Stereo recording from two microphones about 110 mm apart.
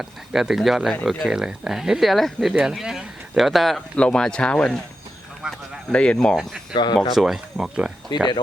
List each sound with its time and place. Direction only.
0.0 s speech: 5° right (ahead or behind)
5.4 s a sound: 5° right (ahead or behind)
5.9 s speech: 10° left (ahead or behind)
6.7 s speech: 40° left (ahead or behind)
7.1 s speech: centre (ahead or behind)